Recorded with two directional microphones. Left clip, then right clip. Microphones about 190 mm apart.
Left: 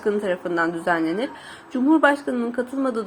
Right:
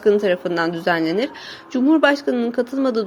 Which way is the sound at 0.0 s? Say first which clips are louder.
Right 6 dB; 30° right (ahead or behind).